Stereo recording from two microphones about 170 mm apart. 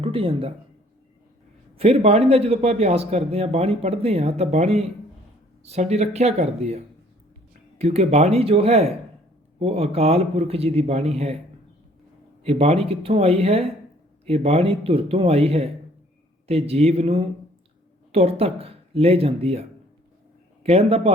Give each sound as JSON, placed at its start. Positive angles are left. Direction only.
{"t": 0.0, "sound": "speech", "side_deg": -30}
{"t": 1.8, "sound": "speech", "side_deg": -35}
{"t": 12.4, "sound": "speech", "side_deg": -35}
{"t": 20.7, "sound": "speech", "side_deg": -35}